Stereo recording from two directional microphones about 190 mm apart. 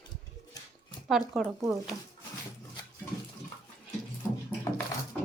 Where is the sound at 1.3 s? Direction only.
Centre (ahead or behind).